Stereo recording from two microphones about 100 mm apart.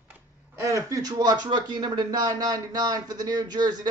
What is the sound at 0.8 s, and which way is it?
Speech, 35° right (ahead or behind).